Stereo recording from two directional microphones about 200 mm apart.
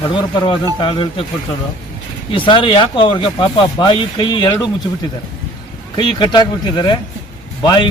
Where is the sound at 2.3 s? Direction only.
25° left (ahead or behind).